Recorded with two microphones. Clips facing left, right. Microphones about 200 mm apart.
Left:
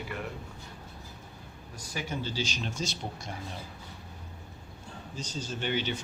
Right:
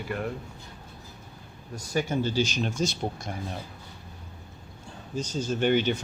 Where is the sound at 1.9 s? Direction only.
45° right (ahead or behind).